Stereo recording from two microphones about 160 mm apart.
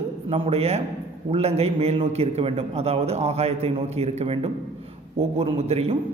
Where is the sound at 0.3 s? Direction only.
35° right (ahead or behind).